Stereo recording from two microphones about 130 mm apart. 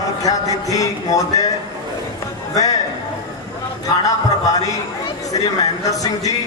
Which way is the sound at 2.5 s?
25° left (ahead or behind).